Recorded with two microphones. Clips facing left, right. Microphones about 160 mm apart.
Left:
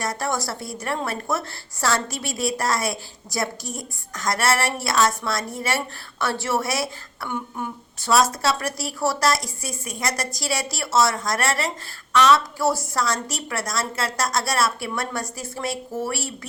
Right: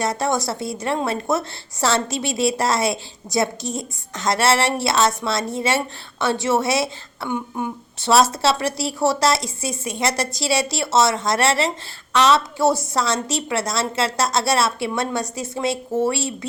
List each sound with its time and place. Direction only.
0.0 s a woman's voice: 20° right (ahead or behind)